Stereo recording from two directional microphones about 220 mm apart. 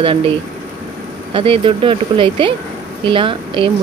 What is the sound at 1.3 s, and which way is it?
Speech, 25° right (ahead or behind).